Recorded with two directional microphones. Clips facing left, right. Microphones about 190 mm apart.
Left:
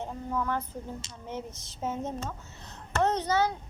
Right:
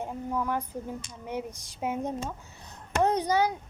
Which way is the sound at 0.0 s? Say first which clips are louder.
Right 1 dB; 10° right (ahead or behind).